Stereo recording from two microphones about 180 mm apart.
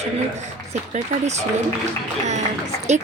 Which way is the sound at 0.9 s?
40° right (ahead or behind).